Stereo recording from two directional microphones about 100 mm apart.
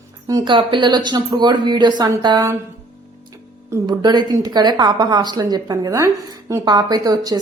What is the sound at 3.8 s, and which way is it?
Speech, 45° right (ahead or behind).